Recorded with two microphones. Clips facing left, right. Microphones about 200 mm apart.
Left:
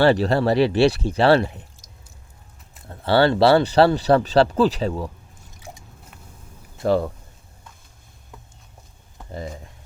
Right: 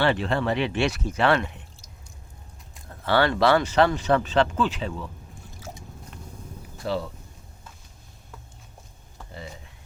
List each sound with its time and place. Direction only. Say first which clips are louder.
0.0 s speech: left 6 dB; 40° left (ahead or behind)
2.8 s speech: left 5 dB; 30° left (ahead or behind)
6.8 s speech: left 8 dB; 50° left (ahead or behind)